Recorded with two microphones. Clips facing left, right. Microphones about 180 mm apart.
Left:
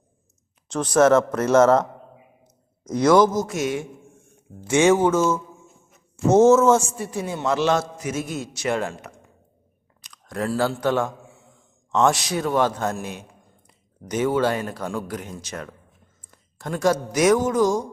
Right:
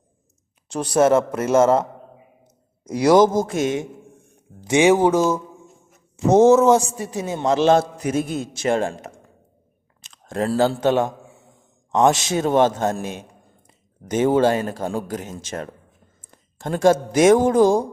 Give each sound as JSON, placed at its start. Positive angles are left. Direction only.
{"t": 0.7, "sound": "a man's voice", "side_deg": -35}
{"t": 1.0, "sound": "a man's voice", "side_deg": -10}
{"t": 2.8, "sound": "a man's voice", "side_deg": -10}
{"t": 4.6, "sound": "a man's voice", "side_deg": -15}
{"t": 9.0, "sound": "a sound", "side_deg": -45}
{"t": 10.0, "sound": "a sound", "side_deg": -25}
{"t": 10.8, "sound": "a man's voice", "side_deg": -20}
{"t": 14.7, "sound": "a man's voice", "side_deg": -40}
{"t": 16.3, "sound": "speech", "side_deg": -30}